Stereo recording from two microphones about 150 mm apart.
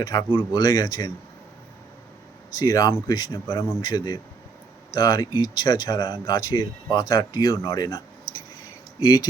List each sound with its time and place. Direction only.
0.0 s speech: 25° left (ahead or behind)
2.6 s speech: 20° left (ahead or behind)